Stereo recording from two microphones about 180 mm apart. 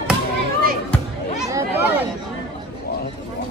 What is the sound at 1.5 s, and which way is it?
Chatter, 15° right (ahead or behind).